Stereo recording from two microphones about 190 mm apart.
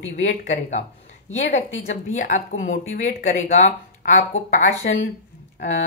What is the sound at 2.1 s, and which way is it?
A woman's voice, 45° left (ahead or behind).